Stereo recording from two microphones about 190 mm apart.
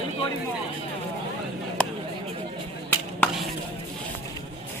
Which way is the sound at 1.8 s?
5° left (ahead or behind).